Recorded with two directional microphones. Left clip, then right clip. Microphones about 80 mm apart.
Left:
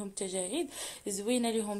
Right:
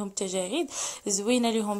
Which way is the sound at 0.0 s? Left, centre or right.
Right.